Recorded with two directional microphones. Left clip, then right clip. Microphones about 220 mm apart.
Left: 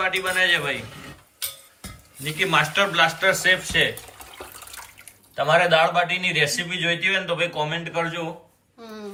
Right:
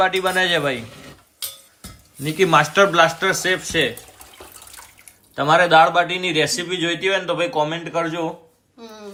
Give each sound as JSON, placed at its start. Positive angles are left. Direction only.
{"t": 0.0, "sound": "a man's voice", "side_deg": -15}
{"t": 2.2, "sound": "a man's voice", "side_deg": -15}
{"t": 5.4, "sound": "a man's voice", "side_deg": -25}